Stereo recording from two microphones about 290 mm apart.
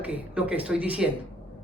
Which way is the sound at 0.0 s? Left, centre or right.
Centre.